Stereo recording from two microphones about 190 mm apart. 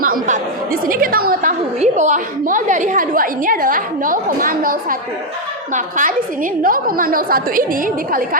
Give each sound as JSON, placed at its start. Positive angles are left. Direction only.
{"t": 0.0, "sound": "chatter", "side_deg": -50}
{"t": 1.8, "sound": "a woman's voice", "side_deg": -40}